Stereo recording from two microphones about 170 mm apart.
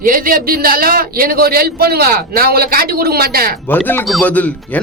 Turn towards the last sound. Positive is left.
turn(degrees=10)  # may be behind; listen again after turning